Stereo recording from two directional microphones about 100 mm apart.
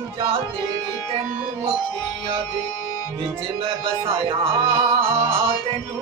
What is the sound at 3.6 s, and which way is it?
Music, 65° right (ahead or behind).